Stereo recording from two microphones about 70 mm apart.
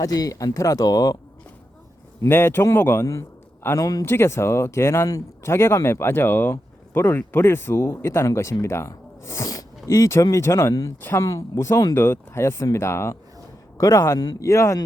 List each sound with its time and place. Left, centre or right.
0.0 s speech: left
2.2 s speech: left
3.0 s a sound: left
3.8 s speech: left
4.0 s speech: left
9.5 s a sound: left
10.3 s speech: left
11.9 s speech: left